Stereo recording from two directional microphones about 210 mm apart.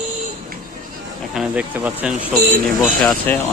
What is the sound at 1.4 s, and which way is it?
Speech, 5° right (ahead or behind).